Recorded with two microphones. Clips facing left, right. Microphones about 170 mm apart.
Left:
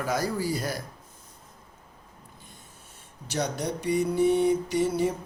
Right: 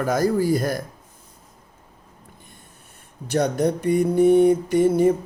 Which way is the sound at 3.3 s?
55° right (ahead or behind).